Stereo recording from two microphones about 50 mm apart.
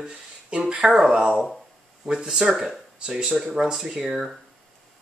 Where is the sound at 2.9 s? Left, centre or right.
Centre.